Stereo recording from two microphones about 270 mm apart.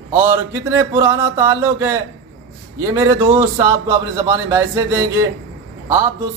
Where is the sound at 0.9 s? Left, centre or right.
Centre.